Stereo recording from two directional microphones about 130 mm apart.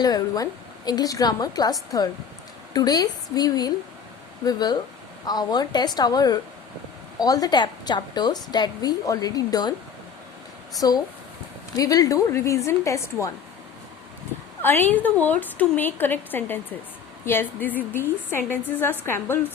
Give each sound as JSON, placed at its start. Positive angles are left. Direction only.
{"t": 0.0, "sound": "a woman's voice", "side_deg": 30}
{"t": 10.8, "sound": "a woman's voice", "side_deg": 30}
{"t": 14.6, "sound": "a woman's voice", "side_deg": 15}